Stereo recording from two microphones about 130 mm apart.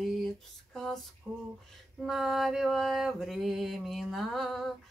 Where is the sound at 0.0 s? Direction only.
Centre (ahead or behind).